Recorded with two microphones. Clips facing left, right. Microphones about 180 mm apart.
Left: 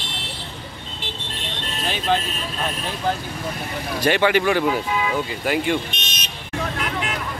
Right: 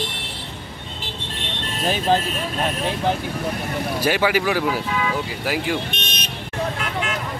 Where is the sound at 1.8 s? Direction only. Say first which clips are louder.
Right 3 dB; 40° right (ahead or behind).